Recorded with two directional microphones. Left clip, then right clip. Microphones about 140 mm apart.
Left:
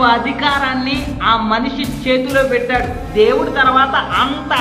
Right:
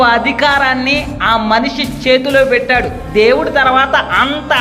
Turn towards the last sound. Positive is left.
turn(degrees=-45)  # may be behind; listen again after turning